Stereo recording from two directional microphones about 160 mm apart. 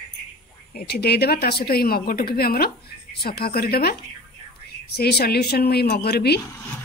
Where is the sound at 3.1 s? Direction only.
85° left.